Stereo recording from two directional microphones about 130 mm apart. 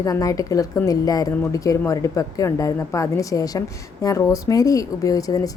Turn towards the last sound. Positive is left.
turn(degrees=25)  # may be behind; listen again after turning